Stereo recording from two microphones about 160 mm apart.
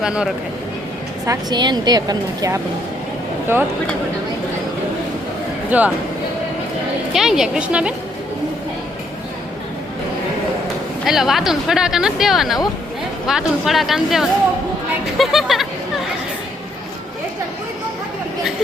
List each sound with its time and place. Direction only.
0.0 s speech: 5° right (ahead or behind)
1.3 s a woman's voice: 25° right (ahead or behind)
5.7 s speech: 10° right (ahead or behind)
7.1 s speech: centre (ahead or behind)
11.0 s speech: centre (ahead or behind)